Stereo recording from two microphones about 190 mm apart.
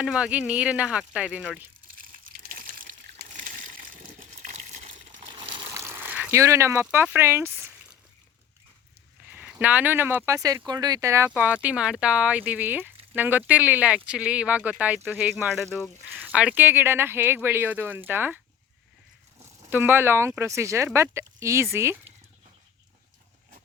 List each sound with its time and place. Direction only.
0.0 s speech: 5° right (ahead or behind)
2.0 s water: 45° right (ahead or behind)
5.4 s a sound: 25° right (ahead or behind)
9.4 s speech: 10° right (ahead or behind)
19.4 s speech: 10° right (ahead or behind)